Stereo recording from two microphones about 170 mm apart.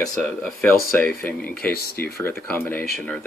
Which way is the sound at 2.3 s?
10° left (ahead or behind).